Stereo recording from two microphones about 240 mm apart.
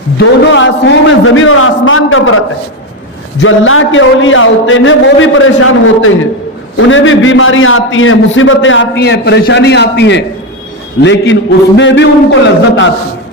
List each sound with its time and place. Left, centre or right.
0.2 s a man's voice: left
3.4 s a man's voice: left